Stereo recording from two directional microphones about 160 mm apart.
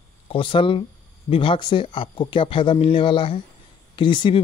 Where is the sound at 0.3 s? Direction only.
30° left (ahead or behind).